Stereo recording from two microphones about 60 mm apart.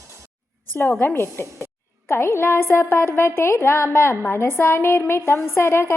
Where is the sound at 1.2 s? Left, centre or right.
Left.